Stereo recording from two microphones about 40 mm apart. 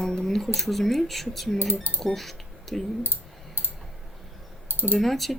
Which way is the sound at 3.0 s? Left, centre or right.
Right.